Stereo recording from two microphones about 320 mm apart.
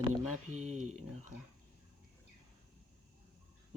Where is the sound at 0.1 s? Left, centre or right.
Right.